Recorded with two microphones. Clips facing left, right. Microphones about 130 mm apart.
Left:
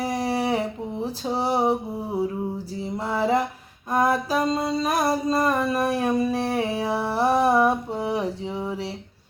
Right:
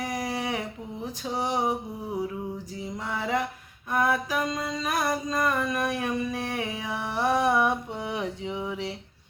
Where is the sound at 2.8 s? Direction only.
30° left (ahead or behind).